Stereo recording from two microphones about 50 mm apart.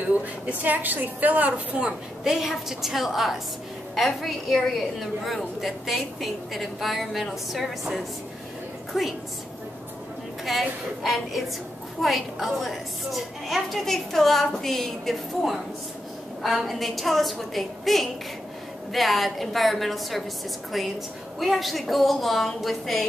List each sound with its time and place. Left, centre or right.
0.0 s a woman's voice: right
2.2 s a woman's voice: centre
10.4 s a woman's voice: centre